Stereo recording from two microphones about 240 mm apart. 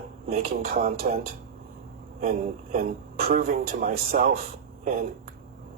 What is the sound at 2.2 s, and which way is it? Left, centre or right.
Speech, right.